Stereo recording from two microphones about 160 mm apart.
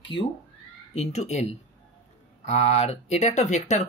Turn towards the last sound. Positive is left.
turn(degrees=45)  # may be behind; listen again after turning